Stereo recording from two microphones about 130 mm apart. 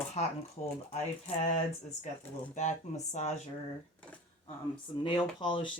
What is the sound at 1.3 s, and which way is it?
Speech, 60° left (ahead or behind).